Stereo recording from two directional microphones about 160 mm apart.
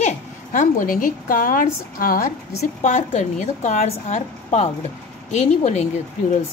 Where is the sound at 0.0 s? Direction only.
50° left (ahead or behind).